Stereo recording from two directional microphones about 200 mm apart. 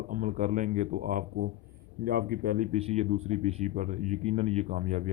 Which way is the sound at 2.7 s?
30° right (ahead or behind).